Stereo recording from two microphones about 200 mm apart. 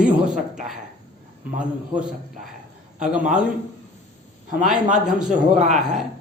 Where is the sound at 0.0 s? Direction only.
5° right (ahead or behind).